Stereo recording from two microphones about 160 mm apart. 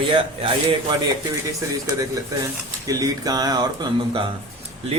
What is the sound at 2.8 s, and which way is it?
Speech, 20° right (ahead or behind).